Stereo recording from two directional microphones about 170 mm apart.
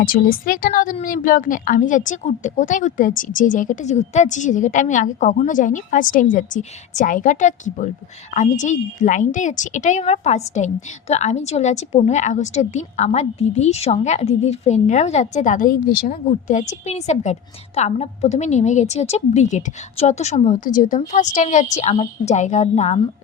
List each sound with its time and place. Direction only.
0.0 s a woman's voice: 55° left (ahead or behind); by 23.0 s 40° left (ahead or behind)